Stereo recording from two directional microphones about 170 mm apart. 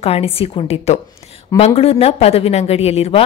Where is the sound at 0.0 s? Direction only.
35° left (ahead or behind).